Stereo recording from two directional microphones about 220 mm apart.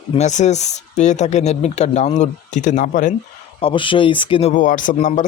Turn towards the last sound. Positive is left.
turn(degrees=35)  # may be behind; listen again after turning